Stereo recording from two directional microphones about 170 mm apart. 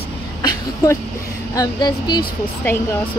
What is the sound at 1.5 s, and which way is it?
Speech, 25° left (ahead or behind).